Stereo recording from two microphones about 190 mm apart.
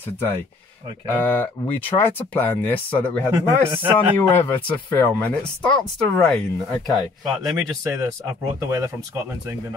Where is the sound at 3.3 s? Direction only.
25° right (ahead or behind).